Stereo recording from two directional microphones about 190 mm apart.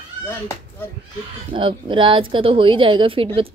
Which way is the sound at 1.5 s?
25° right (ahead or behind).